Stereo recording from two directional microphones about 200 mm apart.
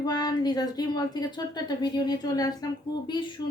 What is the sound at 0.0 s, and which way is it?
A woman's voice, 20° left (ahead or behind).